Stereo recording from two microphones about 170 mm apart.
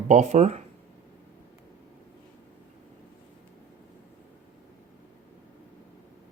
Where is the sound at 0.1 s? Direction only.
45° right (ahead or behind).